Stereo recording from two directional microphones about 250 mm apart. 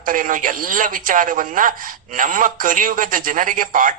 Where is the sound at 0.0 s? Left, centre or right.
Right.